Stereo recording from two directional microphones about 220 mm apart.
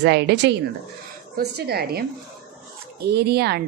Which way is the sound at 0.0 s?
50° right (ahead or behind).